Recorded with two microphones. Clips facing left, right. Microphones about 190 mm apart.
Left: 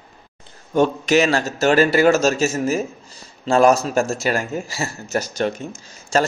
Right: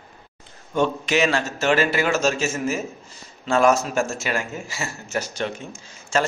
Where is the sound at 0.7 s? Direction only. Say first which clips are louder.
Left 5 dB; 40° left (ahead or behind).